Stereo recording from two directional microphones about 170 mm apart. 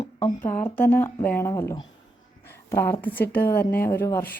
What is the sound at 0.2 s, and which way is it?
A woman's voice, 10° left (ahead or behind).